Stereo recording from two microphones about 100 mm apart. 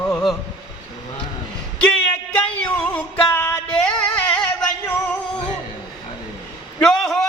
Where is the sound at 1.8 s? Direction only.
10° left (ahead or behind).